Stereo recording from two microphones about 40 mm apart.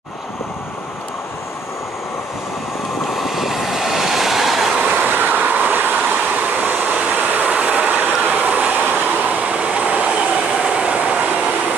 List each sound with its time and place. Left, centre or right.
3.1 s vehicle: centre
4.9 s train: right
6.6 s vehicle: right
9.5 s train: right